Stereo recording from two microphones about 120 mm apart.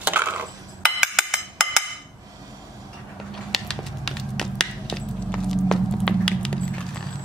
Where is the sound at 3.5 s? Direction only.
5° left (ahead or behind).